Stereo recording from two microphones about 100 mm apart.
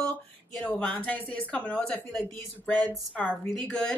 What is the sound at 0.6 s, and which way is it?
Speech, 15° left (ahead or behind).